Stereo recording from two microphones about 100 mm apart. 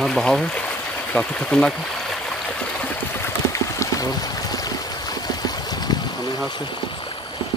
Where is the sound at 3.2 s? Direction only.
30° left (ahead or behind); by 6.7 s 45° left (ahead or behind).